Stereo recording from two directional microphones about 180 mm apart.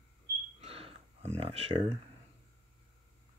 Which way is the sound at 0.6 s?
35° right (ahead or behind).